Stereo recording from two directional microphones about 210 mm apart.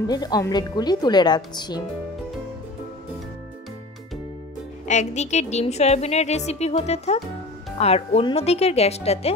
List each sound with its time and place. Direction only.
0.0 s speech: 20° left (ahead or behind)
4.8 s a woman's voice: 35° left (ahead or behind)